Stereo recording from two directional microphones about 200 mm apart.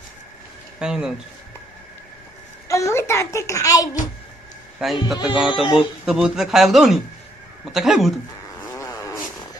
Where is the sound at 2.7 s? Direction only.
15° left (ahead or behind).